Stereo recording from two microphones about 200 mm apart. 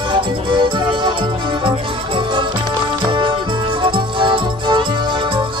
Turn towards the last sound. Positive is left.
turn(degrees=-25)  # may be behind; listen again after turning